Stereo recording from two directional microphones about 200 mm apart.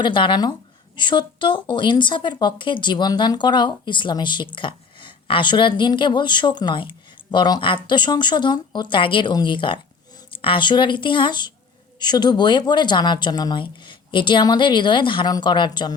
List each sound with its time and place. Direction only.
0.0 s a woman's voice: 25° left (ahead or behind)